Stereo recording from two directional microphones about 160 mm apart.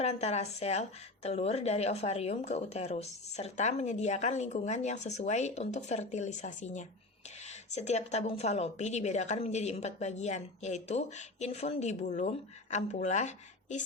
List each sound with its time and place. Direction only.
0.0 s a woman's voice: 40° left (ahead or behind)